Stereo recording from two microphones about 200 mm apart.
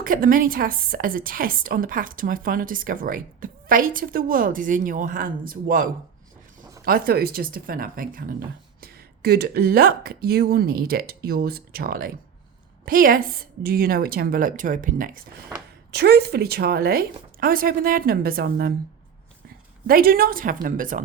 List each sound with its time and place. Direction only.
0.0 s a woman's voice: 45° right (ahead or behind)
6.8 s a woman's voice: 45° right (ahead or behind)
15.9 s a woman's voice: 55° right (ahead or behind)
19.9 s a woman's voice: 45° right (ahead or behind)